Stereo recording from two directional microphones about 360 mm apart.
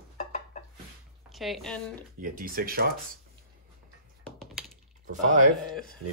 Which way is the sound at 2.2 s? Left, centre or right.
Right.